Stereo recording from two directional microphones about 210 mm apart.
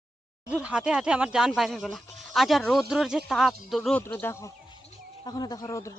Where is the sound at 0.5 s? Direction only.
5° right (ahead or behind).